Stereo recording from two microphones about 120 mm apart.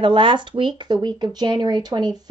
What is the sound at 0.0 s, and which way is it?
A woman's voice, 45° right (ahead or behind).